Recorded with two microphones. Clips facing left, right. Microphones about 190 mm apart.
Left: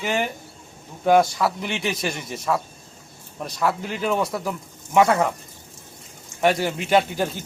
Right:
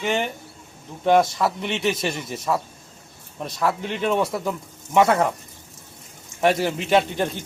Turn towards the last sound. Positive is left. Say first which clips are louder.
# even
turn(degrees=5)  # may be behind; listen again after turning